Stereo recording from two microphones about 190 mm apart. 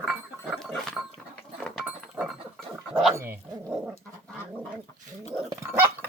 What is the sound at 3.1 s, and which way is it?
Dog, 15° right (ahead or behind).